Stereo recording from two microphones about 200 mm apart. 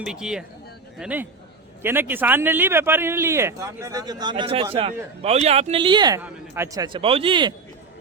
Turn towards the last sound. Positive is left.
turn(degrees=-25)  # may be behind; listen again after turning